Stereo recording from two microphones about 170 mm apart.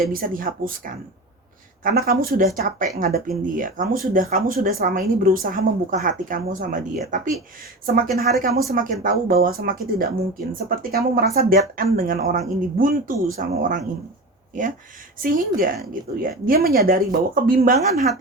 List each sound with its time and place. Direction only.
0.0 s speech: 60° right (ahead or behind)
1.8 s speech: 60° right (ahead or behind)
15.2 s speech: 55° right (ahead or behind)